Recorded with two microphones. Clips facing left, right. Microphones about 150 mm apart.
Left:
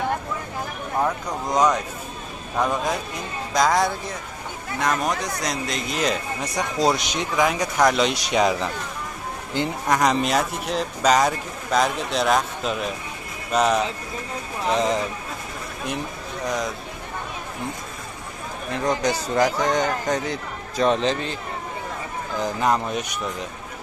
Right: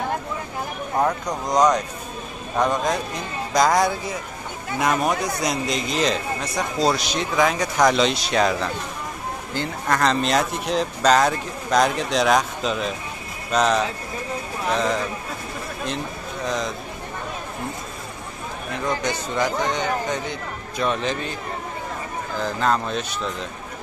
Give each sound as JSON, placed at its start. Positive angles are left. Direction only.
{"t": 1.5, "sound": "a man's voice", "side_deg": 0}
{"t": 14.7, "sound": "speech", "side_deg": 20}
{"t": 16.4, "sound": "a man's voice", "side_deg": 10}
{"t": 19.0, "sound": "speech", "side_deg": 35}
{"t": 22.4, "sound": "a man's voice", "side_deg": 15}